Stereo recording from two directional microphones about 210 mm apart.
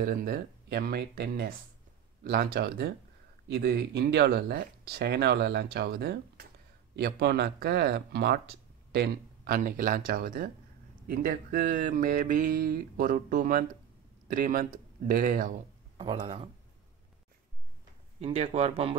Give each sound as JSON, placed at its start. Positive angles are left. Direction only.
{"t": 0.0, "sound": "speech", "side_deg": -45}
{"t": 16.0, "sound": "speech", "side_deg": -25}
{"t": 18.2, "sound": "speech", "side_deg": -30}